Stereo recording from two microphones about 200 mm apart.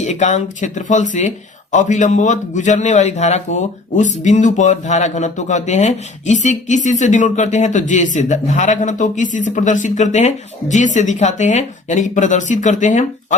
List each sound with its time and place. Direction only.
0.0 s a man's voice: 35° left (ahead or behind)